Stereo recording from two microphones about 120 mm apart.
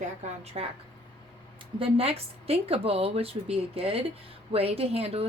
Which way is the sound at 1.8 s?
50° right (ahead or behind).